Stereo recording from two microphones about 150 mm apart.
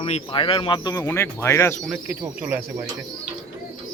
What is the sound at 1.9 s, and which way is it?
Speech, 15° right (ahead or behind).